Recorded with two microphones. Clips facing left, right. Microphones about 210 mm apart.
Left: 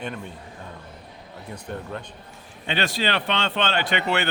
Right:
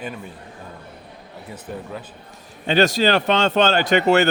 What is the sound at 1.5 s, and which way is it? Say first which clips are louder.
Speech: right 1 dB; 5° right (ahead or behind).